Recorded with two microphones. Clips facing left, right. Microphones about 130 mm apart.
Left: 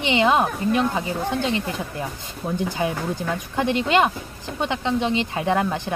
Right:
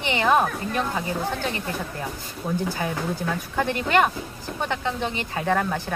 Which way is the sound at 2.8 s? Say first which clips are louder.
Left 2 dB; 20° left (ahead or behind).